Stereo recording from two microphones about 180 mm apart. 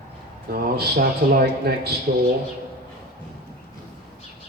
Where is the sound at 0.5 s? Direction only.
60° right (ahead or behind).